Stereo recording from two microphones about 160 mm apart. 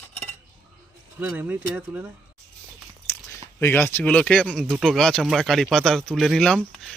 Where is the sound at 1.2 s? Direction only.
10° right (ahead or behind).